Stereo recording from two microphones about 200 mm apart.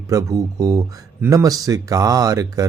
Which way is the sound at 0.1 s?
15° right (ahead or behind).